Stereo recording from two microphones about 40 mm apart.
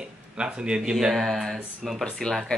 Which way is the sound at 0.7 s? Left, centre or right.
Centre.